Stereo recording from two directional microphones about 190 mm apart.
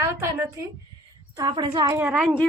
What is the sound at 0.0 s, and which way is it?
A woman's voice, 15° right (ahead or behind).